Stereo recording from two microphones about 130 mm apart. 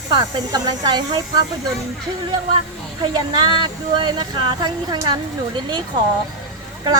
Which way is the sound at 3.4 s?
35° right (ahead or behind).